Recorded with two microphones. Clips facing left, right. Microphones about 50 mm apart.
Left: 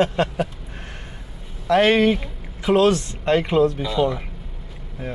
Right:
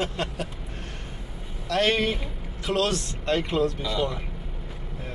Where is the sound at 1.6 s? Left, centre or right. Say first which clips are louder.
Left 8 dB; left.